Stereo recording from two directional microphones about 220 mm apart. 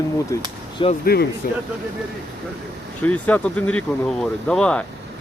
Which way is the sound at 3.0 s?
5° left (ahead or behind).